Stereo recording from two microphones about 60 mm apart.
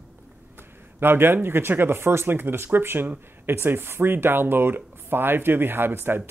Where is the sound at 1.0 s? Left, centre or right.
Right.